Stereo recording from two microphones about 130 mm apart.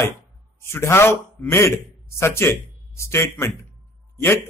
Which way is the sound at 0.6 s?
20° left (ahead or behind).